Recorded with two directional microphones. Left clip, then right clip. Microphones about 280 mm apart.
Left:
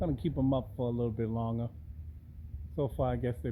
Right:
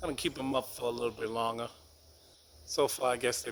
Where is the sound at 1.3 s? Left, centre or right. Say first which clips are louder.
Right 5 dB; right.